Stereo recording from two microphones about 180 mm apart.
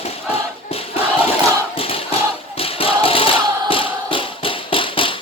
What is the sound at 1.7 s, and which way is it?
Choir, 30° left (ahead or behind).